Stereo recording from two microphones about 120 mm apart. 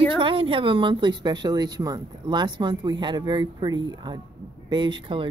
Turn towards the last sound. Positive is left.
turn(degrees=-40)  # may be behind; listen again after turning